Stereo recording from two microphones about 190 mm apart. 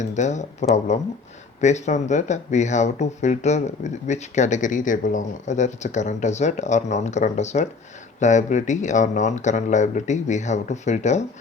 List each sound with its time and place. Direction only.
0.0 s speech: 40° left (ahead or behind)